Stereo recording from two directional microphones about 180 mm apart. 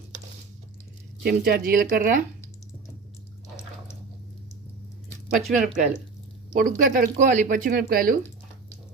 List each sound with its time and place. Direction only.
1.2 s speech: 60° right (ahead or behind)
5.3 s speech: centre (ahead or behind)
6.5 s speech: 50° right (ahead or behind)